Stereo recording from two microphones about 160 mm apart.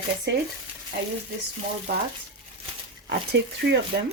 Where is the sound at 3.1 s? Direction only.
90° right.